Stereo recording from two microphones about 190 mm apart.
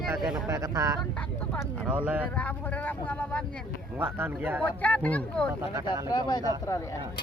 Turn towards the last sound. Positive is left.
turn(degrees=15)  # may be behind; listen again after turning